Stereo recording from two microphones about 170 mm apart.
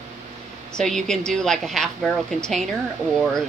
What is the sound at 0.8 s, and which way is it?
Speech, 5° left (ahead or behind).